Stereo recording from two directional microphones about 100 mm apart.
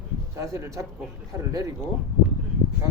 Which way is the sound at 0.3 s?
30° right (ahead or behind).